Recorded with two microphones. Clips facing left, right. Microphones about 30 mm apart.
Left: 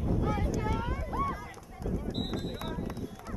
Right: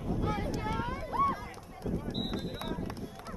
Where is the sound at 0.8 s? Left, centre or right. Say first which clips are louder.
Right 3 dB; right.